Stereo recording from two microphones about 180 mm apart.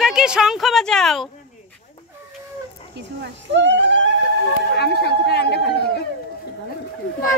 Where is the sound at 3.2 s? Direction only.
75° right (ahead or behind).